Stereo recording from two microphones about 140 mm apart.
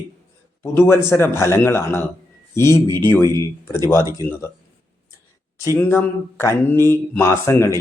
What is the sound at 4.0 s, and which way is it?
Speech, 20° right (ahead or behind).